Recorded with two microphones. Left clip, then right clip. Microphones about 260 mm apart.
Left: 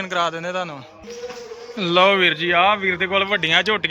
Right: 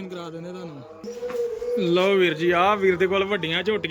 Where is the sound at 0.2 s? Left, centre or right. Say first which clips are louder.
Left 13 dB; left.